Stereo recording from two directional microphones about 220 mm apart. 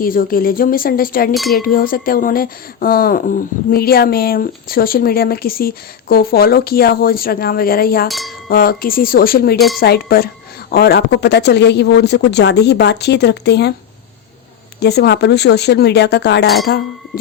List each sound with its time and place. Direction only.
0.0 s a woman's voice: 40° left (ahead or behind)
1.3 s a sound: centre (ahead or behind)
1.5 s speech: 40° left (ahead or behind)
8.0 s a sound: centre (ahead or behind)
8.4 s a woman's voice: 40° left (ahead or behind)
14.8 s speech: 50° left (ahead or behind)